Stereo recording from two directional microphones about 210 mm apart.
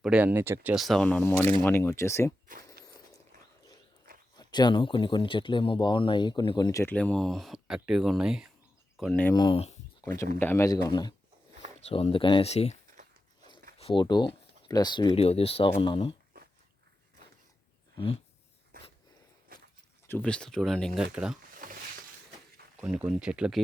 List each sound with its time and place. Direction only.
0.0 s speech: 5° right (ahead or behind); by 2.3 s 15° left (ahead or behind)
2.8 s dog: 50° right (ahead or behind)
4.4 s speech: 20° left (ahead or behind); by 9.3 s 5° left (ahead or behind)
9.3 s speech: 20° left (ahead or behind)
10.0 s speech: 15° left (ahead or behind); by 12.7 s 30° left (ahead or behind)
13.7 s speech: 25° left (ahead or behind)
17.9 s a sound: 25° left (ahead or behind)
20.1 s speech: 5° left (ahead or behind)
22.8 s speech: 5° right (ahead or behind)